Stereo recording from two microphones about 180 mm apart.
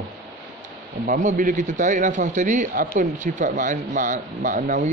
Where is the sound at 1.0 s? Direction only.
45° right (ahead or behind).